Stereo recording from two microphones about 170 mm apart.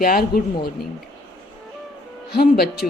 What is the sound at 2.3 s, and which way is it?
Speech, 65° left (ahead or behind).